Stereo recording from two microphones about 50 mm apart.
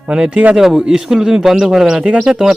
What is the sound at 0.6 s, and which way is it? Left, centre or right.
A man's voice, centre.